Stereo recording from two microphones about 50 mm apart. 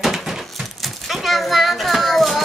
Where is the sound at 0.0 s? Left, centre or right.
Centre.